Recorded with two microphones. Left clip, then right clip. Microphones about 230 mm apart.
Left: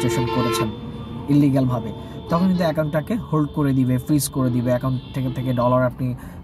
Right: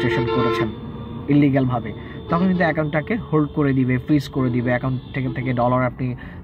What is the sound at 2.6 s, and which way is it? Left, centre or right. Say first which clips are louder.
Speech: right 1 dB; left.